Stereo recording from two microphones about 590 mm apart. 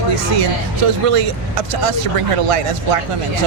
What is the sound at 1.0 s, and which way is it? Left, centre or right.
Speech, right.